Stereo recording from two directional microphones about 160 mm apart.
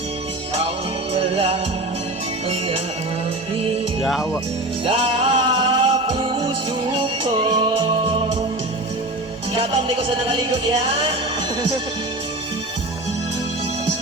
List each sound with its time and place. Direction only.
1.1 s music: 40° right (ahead or behind)
4.0 s speech: centre (ahead or behind)
4.9 s music: 35° right (ahead or behind)
9.6 s music: 35° right (ahead or behind)